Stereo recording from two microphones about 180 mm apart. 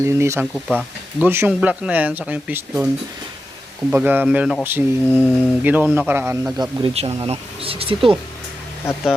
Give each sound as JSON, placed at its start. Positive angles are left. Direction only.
{"t": 0.0, "sound": "speech", "side_deg": -15}
{"t": 3.9, "sound": "speech", "side_deg": -10}
{"t": 6.6, "sound": "speech", "side_deg": -30}